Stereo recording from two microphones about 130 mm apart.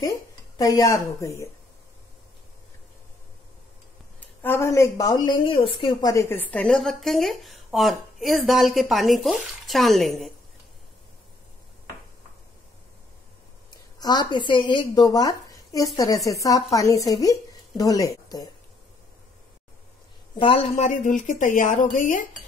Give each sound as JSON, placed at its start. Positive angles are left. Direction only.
{"t": 0.6, "sound": "speech", "side_deg": 25}
{"t": 4.4, "sound": "speech", "side_deg": 20}
{"t": 5.9, "sound": "a woman's voice", "side_deg": 25}
{"t": 13.9, "sound": "a woman's voice", "side_deg": 35}
{"t": 20.3, "sound": "speech", "side_deg": 45}